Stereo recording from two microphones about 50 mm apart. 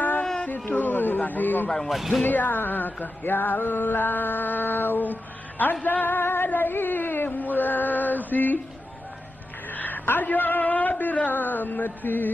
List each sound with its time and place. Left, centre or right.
0.7 s a sound: left
1.9 s speech: centre
2.2 s music: left
9.7 s speech: left